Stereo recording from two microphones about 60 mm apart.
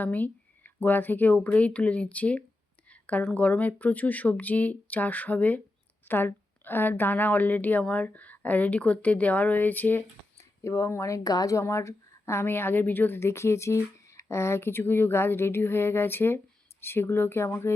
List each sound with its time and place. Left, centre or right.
0.0 s a woman's voice: left
2.9 s a sound: left
3.3 s a woman's voice: left
10.3 s speech: left
11.2 s speech: left
11.6 s a woman's voice: left